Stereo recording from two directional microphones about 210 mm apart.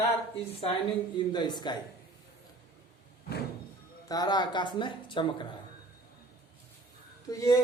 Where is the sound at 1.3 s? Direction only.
20° left (ahead or behind).